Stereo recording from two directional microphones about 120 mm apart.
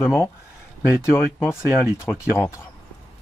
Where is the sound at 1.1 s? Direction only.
20° left (ahead or behind).